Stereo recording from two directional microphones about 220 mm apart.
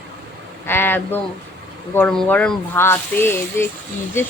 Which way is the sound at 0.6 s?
10° left (ahead or behind).